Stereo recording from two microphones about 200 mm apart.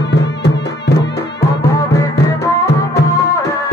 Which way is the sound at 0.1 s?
60° left (ahead or behind).